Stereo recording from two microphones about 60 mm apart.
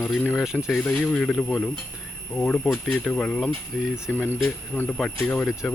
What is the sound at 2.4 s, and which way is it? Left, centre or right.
Speech, left.